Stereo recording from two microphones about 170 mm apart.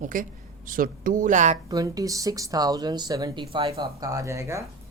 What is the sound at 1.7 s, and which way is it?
Speech, 20° right (ahead or behind).